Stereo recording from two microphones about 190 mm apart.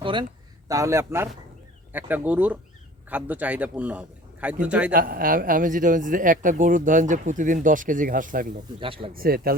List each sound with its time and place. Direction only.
0.0 s a man's voice: 25° right (ahead or behind); by 4.9 s 5° right (ahead or behind)
4.9 s a man's voice: 50° right (ahead or behind)
8.8 s speech: 30° right (ahead or behind)
9.1 s a man's voice: 50° right (ahead or behind)